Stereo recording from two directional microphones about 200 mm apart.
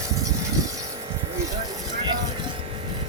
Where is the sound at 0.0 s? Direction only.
15° right (ahead or behind).